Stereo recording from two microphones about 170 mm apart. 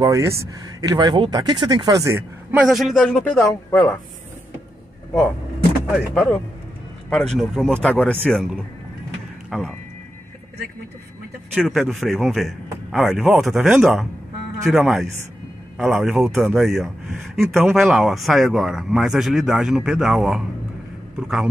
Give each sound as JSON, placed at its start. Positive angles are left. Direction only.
{"t": 0.0, "sound": "speech", "side_deg": -20}
{"t": 2.6, "sound": "speech", "side_deg": 0}
{"t": 5.9, "sound": "speech", "side_deg": 0}
{"t": 11.6, "sound": "a man's voice", "side_deg": 0}